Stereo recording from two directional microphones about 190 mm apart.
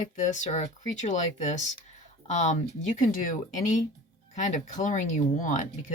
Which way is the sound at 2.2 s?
40° left (ahead or behind).